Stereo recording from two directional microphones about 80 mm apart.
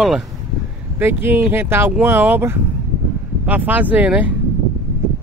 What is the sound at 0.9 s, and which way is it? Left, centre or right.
Speech, right.